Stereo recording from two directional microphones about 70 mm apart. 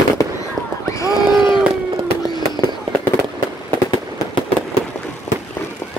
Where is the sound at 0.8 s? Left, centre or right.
Left.